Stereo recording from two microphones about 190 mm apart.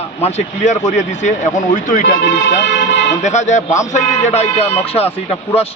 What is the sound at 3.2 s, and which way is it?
Speech, 40° left (ahead or behind).